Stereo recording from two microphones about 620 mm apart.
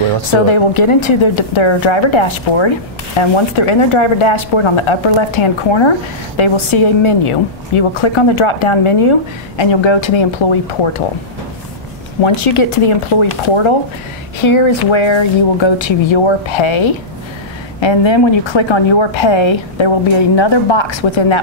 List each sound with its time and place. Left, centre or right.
0.5 s speech: left
12.2 s speech: left